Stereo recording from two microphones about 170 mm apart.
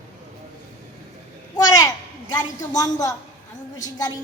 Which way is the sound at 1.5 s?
20° left (ahead or behind).